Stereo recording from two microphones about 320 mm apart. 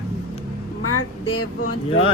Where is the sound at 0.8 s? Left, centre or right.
Left.